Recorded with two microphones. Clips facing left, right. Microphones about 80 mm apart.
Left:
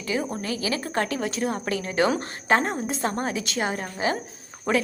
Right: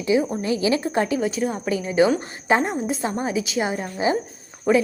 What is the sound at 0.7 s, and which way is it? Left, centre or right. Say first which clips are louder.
A woman's voice: right 5 dB; centre.